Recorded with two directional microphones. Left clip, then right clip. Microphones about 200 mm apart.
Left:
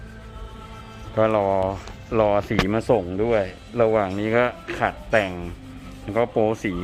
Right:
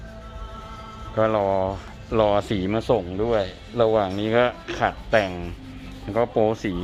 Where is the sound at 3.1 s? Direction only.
20° left (ahead or behind).